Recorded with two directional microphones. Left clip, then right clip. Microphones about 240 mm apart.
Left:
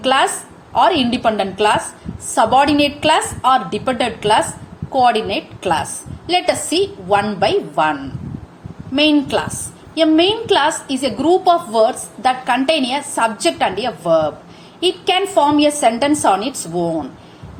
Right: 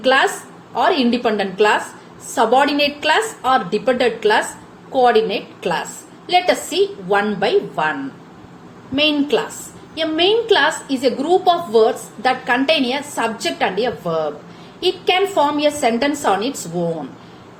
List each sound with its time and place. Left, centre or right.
0.0 s a woman's voice: left
9.0 s a woman's voice: left